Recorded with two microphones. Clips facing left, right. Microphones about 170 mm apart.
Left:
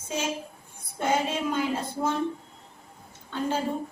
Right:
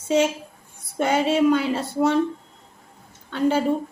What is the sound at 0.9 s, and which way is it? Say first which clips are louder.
A woman's voice: right 7 dB; 80° right.